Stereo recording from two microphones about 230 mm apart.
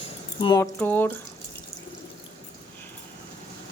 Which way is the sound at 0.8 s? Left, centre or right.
Centre.